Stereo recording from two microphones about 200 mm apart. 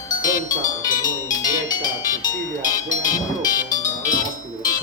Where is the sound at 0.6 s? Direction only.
40° left (ahead or behind).